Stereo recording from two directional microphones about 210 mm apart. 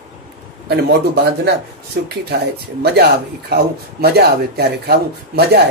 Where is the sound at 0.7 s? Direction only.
50° right (ahead or behind).